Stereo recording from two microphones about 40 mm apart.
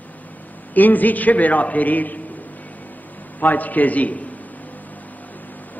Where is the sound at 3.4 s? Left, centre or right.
Left.